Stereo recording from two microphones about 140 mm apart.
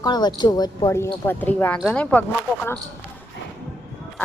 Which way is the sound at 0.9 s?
15° left (ahead or behind).